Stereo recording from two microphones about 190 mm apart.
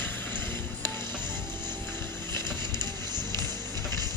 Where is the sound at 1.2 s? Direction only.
10° left (ahead or behind).